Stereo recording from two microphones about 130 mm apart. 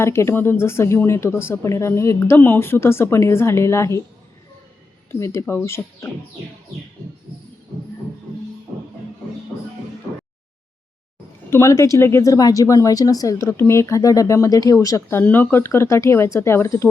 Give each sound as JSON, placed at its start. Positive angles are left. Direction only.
{"t": 0.0, "sound": "speech", "side_deg": 20}
{"t": 5.2, "sound": "speech", "side_deg": 20}
{"t": 11.5, "sound": "speech", "side_deg": 25}
{"t": 15.2, "sound": "speech", "side_deg": 15}